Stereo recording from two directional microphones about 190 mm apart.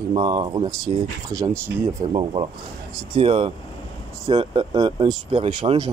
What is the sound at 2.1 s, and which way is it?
Speech, 25° right (ahead or behind).